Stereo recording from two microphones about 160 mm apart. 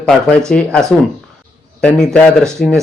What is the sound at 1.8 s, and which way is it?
Speech, 5° left (ahead or behind).